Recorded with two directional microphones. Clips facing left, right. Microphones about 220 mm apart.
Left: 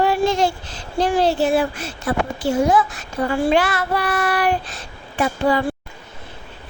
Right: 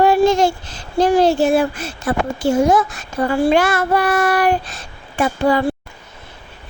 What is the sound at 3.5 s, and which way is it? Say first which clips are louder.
A woman's voice: right 3 dB; 45° right (ahead or behind).